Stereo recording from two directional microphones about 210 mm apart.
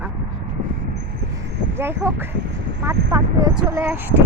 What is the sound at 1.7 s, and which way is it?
Speech, 10° right (ahead or behind).